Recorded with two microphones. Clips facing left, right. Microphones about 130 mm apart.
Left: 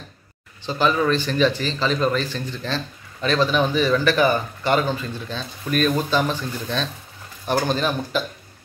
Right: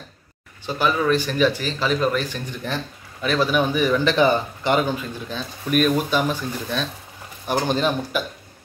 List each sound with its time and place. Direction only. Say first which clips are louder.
0.7 s speech: left 1 dB; 10° right (ahead or behind)